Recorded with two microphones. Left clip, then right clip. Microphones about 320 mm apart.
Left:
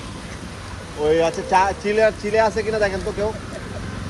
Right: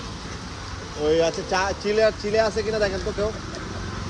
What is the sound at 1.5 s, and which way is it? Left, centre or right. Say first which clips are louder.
Speech: left 7 dB; centre.